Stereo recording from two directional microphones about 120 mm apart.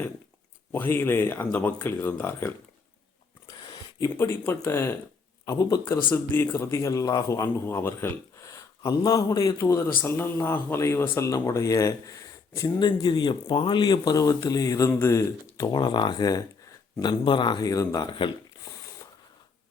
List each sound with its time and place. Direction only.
0.7 s speech: 20° left (ahead or behind)
3.4 s speech: 30° left (ahead or behind)
12.8 s speech: 40° left (ahead or behind)